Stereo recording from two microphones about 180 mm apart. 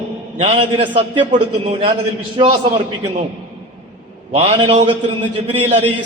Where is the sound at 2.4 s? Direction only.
30° right (ahead or behind).